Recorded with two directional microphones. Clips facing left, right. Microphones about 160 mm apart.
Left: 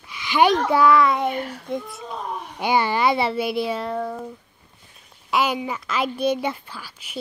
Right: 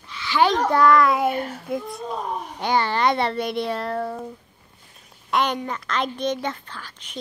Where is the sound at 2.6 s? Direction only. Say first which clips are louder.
Left 1 dB; 10° left (ahead or behind).